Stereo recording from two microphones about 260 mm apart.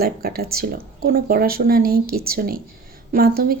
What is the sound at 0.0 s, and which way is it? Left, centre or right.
Speech, right.